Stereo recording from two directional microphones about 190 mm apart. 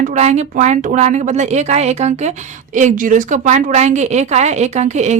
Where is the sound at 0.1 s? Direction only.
35° right (ahead or behind).